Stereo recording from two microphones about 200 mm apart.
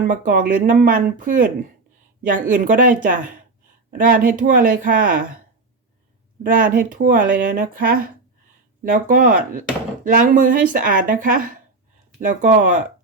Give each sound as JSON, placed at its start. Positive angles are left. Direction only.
{"t": 0.0, "sound": "speech", "side_deg": -40}
{"t": 6.4, "sound": "speech", "side_deg": -45}